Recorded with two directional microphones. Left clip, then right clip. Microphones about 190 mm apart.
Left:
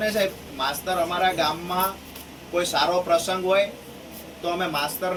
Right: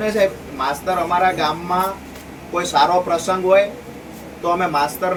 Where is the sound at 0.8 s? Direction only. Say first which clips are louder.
Right 6 dB; 15° right (ahead or behind).